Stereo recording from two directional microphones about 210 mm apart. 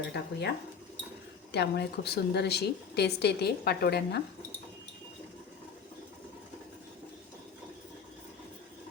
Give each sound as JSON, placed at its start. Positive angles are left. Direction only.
{"t": 0.1, "sound": "speech", "side_deg": 50}
{"t": 1.5, "sound": "speech", "side_deg": 50}